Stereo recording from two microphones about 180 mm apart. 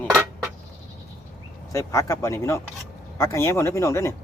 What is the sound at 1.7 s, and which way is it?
Speech, 15° left (ahead or behind).